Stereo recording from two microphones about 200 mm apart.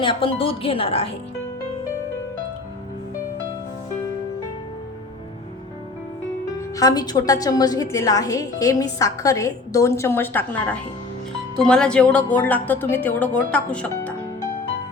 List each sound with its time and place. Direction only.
0.0 s speech: 25° left (ahead or behind)
6.6 s a woman's voice: 15° left (ahead or behind)